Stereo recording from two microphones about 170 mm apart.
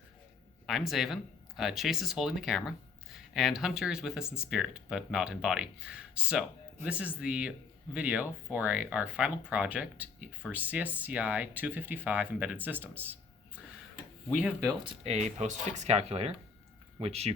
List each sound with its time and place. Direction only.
0.7 s speech: centre (ahead or behind)
15.0 s speech: 40° right (ahead or behind)